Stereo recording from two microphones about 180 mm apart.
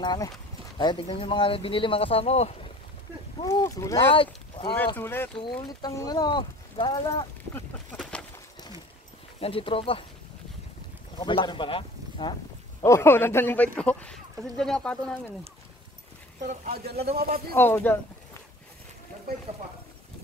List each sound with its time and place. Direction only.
0.0 s speech: 25° left (ahead or behind)
3.3 s speech: 20° left (ahead or behind)
4.9 s a man's voice: 10° left (ahead or behind)
7.5 s a sound: 5° left (ahead or behind)
9.4 s speech: 30° left (ahead or behind)
11.1 s speech: 25° left (ahead or behind)
12.8 s a man's voice: 15° left (ahead or behind)
16.4 s a man's voice: 55° right (ahead or behind)
17.6 s speech: 10° left (ahead or behind)